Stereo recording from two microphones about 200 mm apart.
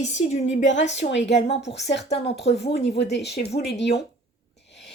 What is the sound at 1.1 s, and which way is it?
Speech, 60° left (ahead or behind).